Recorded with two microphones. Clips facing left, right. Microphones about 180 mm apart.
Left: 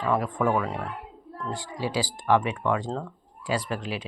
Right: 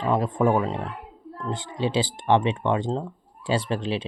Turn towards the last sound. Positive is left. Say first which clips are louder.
# right 4 dB
turn(degrees=-25)  # may be behind; listen again after turning